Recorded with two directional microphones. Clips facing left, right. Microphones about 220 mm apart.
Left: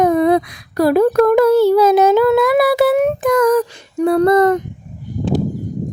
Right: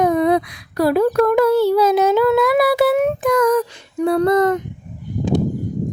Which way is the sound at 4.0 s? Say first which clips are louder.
Left 3 dB; 50° left (ahead or behind).